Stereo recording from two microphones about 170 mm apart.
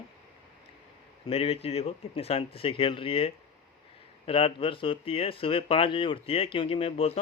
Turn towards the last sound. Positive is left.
turn(degrees=35)  # may be behind; listen again after turning